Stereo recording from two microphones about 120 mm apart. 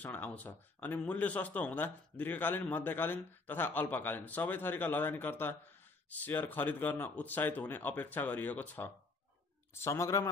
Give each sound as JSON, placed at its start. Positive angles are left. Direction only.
{"t": 0.0, "sound": "a man's voice", "side_deg": 15}